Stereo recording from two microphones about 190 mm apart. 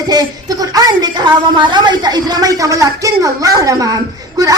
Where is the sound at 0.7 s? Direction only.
20° right (ahead or behind).